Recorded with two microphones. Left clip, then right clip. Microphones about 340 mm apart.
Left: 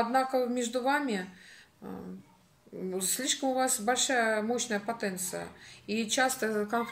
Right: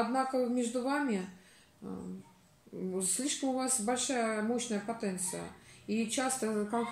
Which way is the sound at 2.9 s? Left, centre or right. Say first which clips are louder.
Left 4 dB; left.